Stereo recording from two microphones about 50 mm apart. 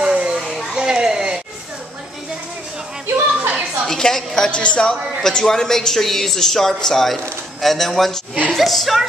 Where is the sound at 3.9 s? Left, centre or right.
Centre.